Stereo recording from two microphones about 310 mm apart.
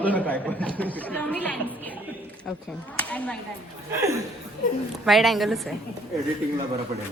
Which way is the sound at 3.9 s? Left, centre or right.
Centre.